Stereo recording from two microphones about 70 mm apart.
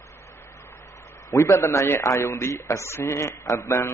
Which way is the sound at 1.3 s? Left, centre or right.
Left.